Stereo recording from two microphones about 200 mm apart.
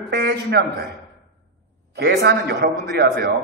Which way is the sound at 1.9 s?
55° right (ahead or behind).